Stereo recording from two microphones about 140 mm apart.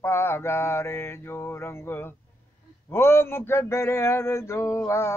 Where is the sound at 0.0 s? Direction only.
15° left (ahead or behind).